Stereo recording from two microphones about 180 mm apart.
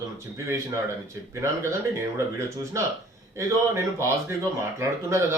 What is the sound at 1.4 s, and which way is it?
A man's voice, 15° right (ahead or behind).